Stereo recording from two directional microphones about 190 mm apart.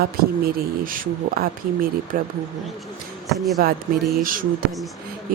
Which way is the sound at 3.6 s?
50° right (ahead or behind).